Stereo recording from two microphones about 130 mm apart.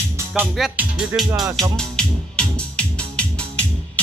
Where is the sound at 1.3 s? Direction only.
20° right (ahead or behind).